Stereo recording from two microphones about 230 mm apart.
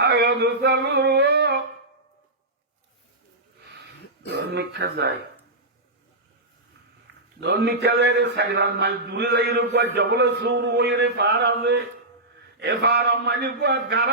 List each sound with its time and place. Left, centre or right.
0.0 s a man's voice: right
4.3 s a man's voice: right
7.3 s a man's voice: right